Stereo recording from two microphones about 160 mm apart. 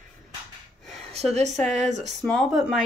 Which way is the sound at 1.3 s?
45° right (ahead or behind).